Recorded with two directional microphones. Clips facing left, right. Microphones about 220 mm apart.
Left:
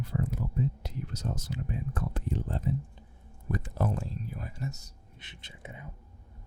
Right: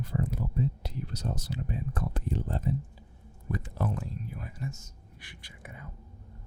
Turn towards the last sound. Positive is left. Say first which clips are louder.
# left 1 dB
turn(degrees=20)  # may be behind; listen again after turning